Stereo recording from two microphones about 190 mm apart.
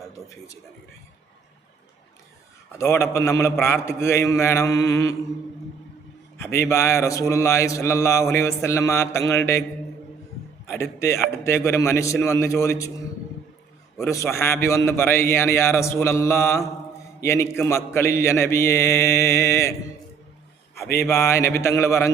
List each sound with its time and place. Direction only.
2.7 s a man's voice: 15° left (ahead or behind)
6.3 s a man's voice: 15° left (ahead or behind)
10.7 s a man's voice: 15° left (ahead or behind)
14.1 s a man's voice: 15° left (ahead or behind)
21.0 s a man's voice: 15° left (ahead or behind)